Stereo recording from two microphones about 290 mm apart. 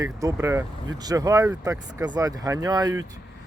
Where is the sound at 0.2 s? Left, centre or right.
Centre.